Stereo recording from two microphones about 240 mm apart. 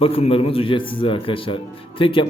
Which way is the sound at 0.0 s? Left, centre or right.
Left.